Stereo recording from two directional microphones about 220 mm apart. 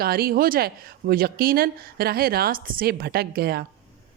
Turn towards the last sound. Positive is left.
turn(degrees=-45)  # may be behind; listen again after turning